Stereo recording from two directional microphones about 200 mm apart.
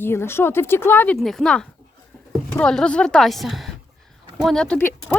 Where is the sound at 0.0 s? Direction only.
10° left (ahead or behind).